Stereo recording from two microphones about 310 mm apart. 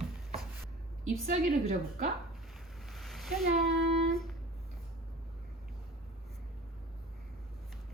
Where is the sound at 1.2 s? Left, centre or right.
Right.